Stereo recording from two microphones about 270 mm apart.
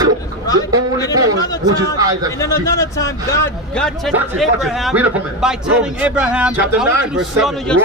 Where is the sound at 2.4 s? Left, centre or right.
Centre.